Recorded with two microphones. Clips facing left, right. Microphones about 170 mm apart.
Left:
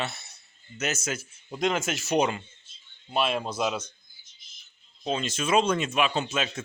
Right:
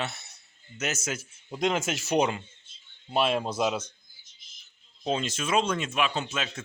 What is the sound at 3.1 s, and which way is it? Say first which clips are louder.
Speech: right 1 dB; 35° right (ahead or behind).